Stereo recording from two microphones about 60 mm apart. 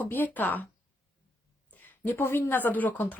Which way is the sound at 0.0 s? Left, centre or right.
Left.